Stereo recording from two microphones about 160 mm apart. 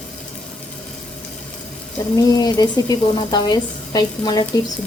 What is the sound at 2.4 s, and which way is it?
Speech, 25° left (ahead or behind).